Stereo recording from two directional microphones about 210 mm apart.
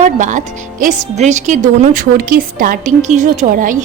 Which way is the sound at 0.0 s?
35° right (ahead or behind).